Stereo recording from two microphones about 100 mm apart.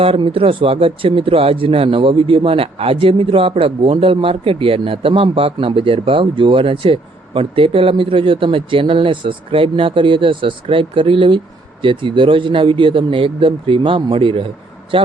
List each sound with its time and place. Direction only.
0.0 s speech: 65° right (ahead or behind)